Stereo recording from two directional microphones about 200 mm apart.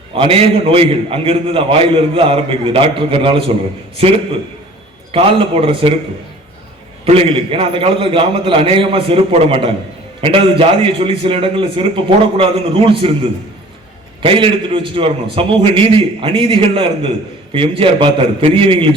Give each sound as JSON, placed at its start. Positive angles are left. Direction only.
{"t": 0.1, "sound": "a man's voice", "side_deg": -25}
{"t": 5.1, "sound": "a man's voice", "side_deg": -25}
{"t": 7.0, "sound": "a man's voice", "side_deg": -30}
{"t": 14.2, "sound": "a man's voice", "side_deg": -25}